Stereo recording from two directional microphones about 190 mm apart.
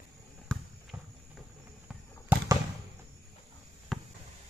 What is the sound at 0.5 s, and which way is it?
Basketball bounce, 5° left (ahead or behind).